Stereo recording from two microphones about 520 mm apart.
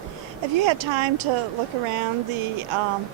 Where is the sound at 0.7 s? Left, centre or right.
Right.